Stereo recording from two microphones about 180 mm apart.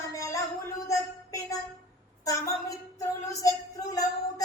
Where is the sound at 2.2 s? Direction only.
20° left (ahead or behind).